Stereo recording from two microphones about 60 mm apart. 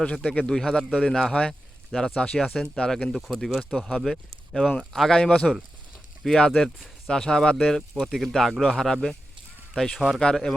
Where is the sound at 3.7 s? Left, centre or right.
Centre.